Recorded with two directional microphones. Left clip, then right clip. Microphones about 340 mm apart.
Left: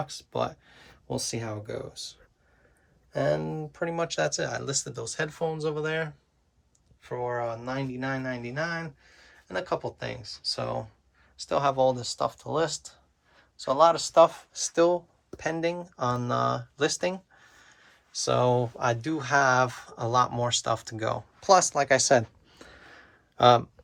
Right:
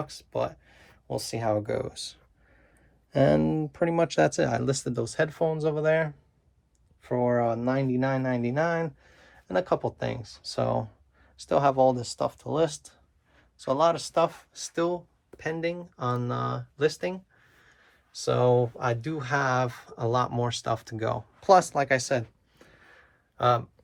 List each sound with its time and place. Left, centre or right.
0.1 s speech: centre
3.1 s speech: right; by 22.2 s centre
22.6 s a sound: left
23.4 s speech: left